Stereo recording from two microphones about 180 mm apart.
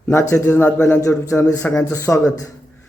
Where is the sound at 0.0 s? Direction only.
15° left (ahead or behind).